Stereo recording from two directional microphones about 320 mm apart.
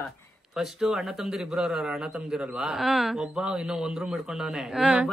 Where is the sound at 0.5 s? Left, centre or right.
Centre.